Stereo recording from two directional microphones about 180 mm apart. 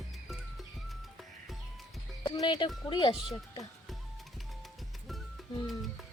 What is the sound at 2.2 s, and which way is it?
Speech, 25° left (ahead or behind).